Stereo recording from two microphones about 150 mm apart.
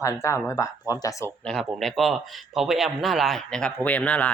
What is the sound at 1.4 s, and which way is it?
Speech, 5° left (ahead or behind).